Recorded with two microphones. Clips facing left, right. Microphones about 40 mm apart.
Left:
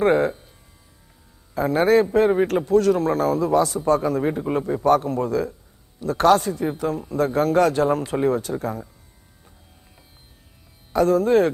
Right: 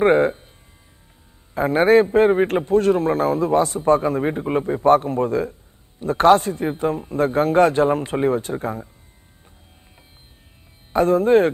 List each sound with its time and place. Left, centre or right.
0.0 s speech: right
1.5 s a man's voice: right
10.9 s speech: right